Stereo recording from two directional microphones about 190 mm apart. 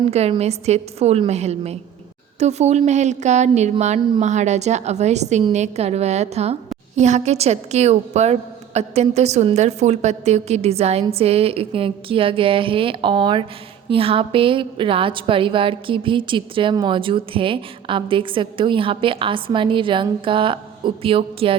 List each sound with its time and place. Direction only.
0.1 s a woman's voice: 35° right (ahead or behind)